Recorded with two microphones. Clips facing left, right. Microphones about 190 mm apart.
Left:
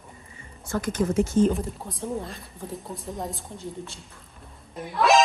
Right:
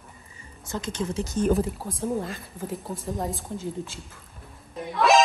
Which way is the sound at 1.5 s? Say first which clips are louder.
Right 6 dB; centre (ahead or behind).